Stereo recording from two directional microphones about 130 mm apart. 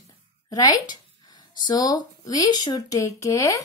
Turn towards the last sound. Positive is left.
turn(degrees=25)  # may be behind; listen again after turning